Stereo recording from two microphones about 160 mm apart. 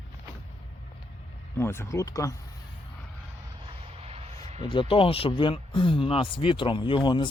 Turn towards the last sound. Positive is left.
turn(degrees=30)  # may be behind; listen again after turning